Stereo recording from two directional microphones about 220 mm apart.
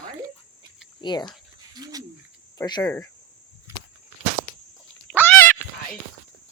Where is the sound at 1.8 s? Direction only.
15° right (ahead or behind).